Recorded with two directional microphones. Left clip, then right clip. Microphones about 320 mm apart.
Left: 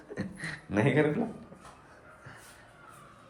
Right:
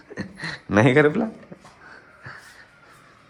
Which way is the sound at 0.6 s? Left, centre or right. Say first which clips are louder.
Right 10 dB; centre.